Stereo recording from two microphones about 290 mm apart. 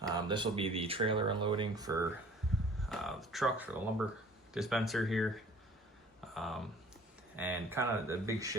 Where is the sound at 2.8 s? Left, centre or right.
Centre.